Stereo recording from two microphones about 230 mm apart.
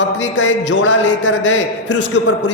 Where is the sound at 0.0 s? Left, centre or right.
Left.